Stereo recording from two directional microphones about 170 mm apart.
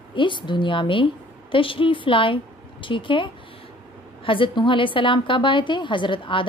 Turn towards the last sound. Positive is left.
turn(degrees=30)  # may be behind; listen again after turning